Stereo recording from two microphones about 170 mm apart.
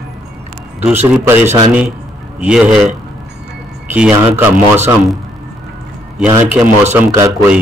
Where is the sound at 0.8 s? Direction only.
10° right (ahead or behind).